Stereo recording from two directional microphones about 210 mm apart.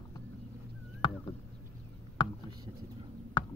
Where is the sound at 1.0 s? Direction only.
25° left (ahead or behind).